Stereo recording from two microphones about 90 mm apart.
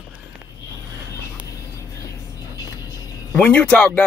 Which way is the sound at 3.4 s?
15° left (ahead or behind).